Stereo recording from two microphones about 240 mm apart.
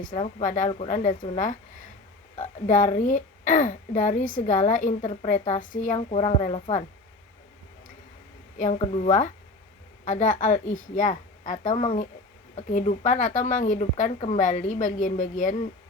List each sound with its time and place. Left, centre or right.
0.0 s speech: left
8.5 s speech: left